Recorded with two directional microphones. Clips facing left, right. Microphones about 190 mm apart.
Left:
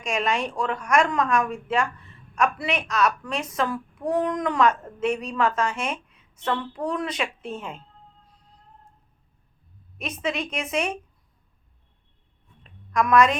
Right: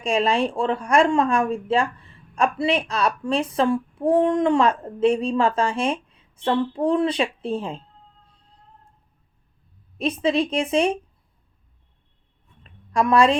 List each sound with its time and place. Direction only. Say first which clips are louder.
0.0 s speech: right 5 dB; 30° right (ahead or behind)
10.0 s speech: right 8 dB; 30° right (ahead or behind)
12.9 s a woman's voice: right 2 dB; 30° right (ahead or behind)